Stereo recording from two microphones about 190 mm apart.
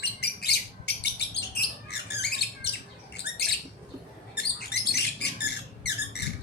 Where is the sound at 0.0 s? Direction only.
60° left (ahead or behind).